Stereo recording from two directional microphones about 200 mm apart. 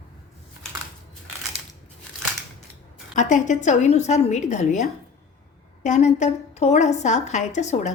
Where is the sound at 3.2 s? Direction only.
35° left (ahead or behind).